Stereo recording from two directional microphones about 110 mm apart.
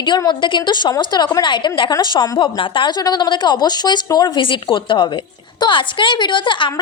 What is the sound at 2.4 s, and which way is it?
A woman's voice, 50° left (ahead or behind).